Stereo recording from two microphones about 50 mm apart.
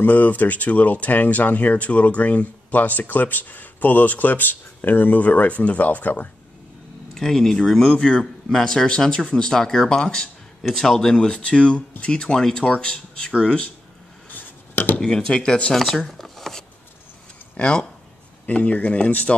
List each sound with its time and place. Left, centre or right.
0.0 s speech: left
7.2 s speech: centre
9.1 s speech: left
14.3 s a sound: left
15.0 s speech: centre
15.7 s speech: centre
17.6 s speech: left